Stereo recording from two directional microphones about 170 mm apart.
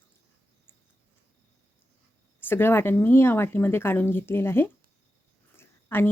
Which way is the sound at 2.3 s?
10° left (ahead or behind).